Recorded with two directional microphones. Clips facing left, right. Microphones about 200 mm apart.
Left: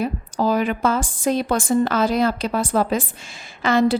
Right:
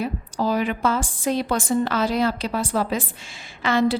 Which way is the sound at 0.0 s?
50° left (ahead or behind).